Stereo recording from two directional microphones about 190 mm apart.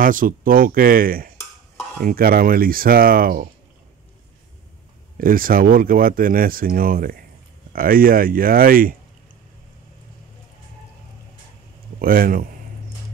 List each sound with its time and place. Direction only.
0.0 s speech: 45° right (ahead or behind)
5.1 s speech: 50° right (ahead or behind)
12.0 s speech: 50° right (ahead or behind)